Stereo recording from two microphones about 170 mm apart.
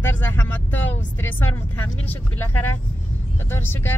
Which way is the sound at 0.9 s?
10° left (ahead or behind).